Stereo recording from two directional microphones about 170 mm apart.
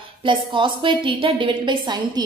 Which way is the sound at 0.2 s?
30° right (ahead or behind).